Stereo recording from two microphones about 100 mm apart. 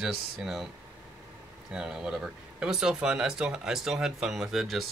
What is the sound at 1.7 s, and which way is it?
Speech, 10° right (ahead or behind).